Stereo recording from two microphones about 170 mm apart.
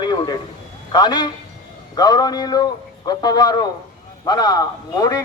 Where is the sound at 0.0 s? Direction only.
25° left (ahead or behind).